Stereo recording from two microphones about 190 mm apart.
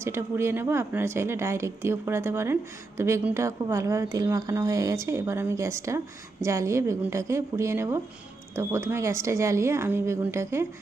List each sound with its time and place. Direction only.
0.0 s a woman's voice: 15° right (ahead or behind)